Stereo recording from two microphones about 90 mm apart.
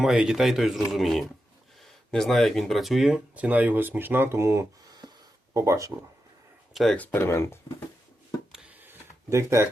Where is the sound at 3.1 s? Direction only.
15° right (ahead or behind); by 5.9 s 35° right (ahead or behind).